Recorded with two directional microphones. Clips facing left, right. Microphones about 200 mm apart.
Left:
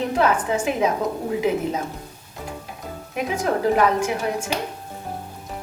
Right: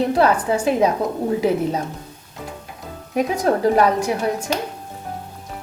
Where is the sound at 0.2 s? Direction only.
35° right (ahead or behind).